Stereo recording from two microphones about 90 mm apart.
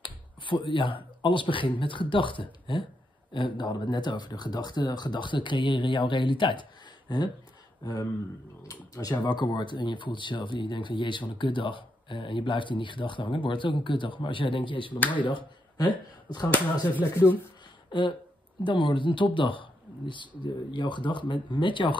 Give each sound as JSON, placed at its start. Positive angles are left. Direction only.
{"t": 0.0, "sound": "speech", "side_deg": 65}
{"t": 9.2, "sound": "speech", "side_deg": 55}
{"t": 16.9, "sound": "speech", "side_deg": 20}
{"t": 18.6, "sound": "speech", "side_deg": 65}